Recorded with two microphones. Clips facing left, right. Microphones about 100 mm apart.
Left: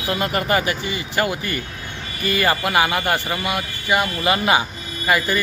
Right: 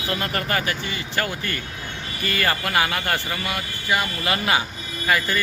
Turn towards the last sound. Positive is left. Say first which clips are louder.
# left 3 dB
turn(degrees=15)  # may be behind; listen again after turning